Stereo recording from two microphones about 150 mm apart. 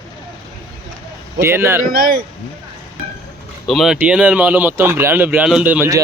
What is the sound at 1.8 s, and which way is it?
Speech, 70° right (ahead or behind).